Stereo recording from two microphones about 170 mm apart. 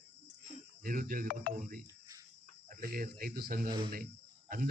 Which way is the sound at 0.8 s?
55° right (ahead or behind).